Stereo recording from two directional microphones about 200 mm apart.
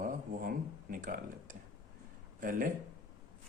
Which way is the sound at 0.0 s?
45° right (ahead or behind).